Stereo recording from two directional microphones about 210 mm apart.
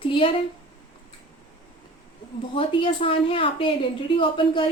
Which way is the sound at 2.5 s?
25° left (ahead or behind).